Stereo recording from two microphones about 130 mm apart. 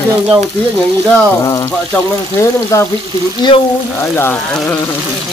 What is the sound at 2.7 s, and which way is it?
Speech, 25° left (ahead or behind).